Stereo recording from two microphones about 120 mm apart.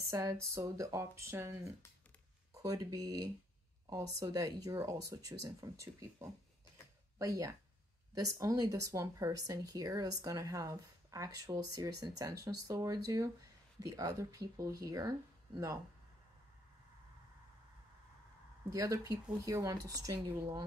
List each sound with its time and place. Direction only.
0.1 s speech: 25° right (ahead or behind)
18.7 s speech: 25° right (ahead or behind)